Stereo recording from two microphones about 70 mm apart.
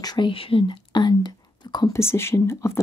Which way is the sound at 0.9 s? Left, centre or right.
Left.